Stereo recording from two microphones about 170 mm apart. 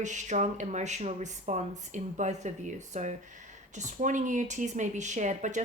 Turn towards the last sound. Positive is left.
turn(degrees=-45)  # may be behind; listen again after turning